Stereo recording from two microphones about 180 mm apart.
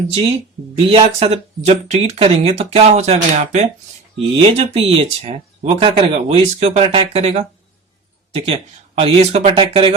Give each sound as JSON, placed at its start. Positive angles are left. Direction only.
{"t": 0.9, "sound": "speech", "side_deg": -35}